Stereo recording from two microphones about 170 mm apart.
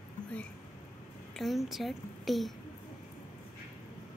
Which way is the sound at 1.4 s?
Centre (ahead or behind).